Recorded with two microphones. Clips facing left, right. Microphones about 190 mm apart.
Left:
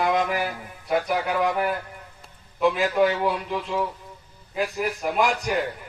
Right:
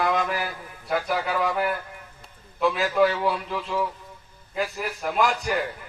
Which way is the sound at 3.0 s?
20° left (ahead or behind).